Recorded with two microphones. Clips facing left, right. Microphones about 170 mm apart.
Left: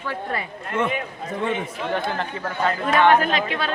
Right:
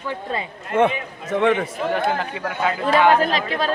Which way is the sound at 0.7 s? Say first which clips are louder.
Right 6 dB; 55° right (ahead or behind).